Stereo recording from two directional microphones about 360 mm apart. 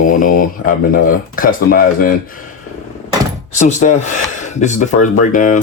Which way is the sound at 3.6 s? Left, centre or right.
Centre.